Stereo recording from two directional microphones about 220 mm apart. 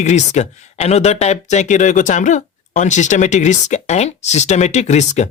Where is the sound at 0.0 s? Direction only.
30° left (ahead or behind).